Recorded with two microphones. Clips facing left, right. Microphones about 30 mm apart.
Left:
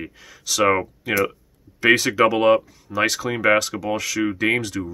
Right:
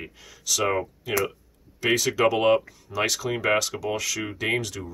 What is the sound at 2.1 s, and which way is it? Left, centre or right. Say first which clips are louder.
Speech: left 4 dB; centre.